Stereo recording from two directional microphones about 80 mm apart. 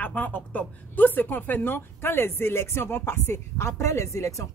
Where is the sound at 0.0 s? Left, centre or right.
Left.